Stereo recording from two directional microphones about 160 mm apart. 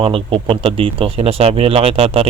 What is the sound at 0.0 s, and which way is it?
Speech, 35° right (ahead or behind).